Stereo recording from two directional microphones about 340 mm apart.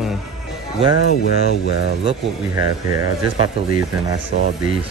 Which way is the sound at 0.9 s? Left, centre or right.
Left.